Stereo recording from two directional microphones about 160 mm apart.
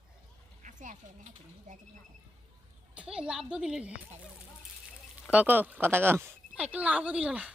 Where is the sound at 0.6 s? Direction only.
50° right (ahead or behind).